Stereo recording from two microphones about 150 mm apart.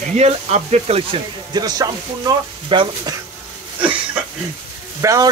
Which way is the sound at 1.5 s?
25° right (ahead or behind).